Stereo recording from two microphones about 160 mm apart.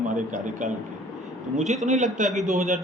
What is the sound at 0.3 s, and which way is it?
A man's voice, 50° right (ahead or behind).